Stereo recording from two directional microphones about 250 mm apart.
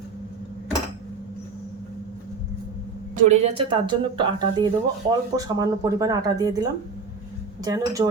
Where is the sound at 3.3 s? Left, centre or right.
Right.